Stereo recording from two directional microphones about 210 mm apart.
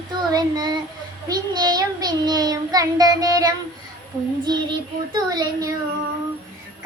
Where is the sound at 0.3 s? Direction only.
20° right (ahead or behind).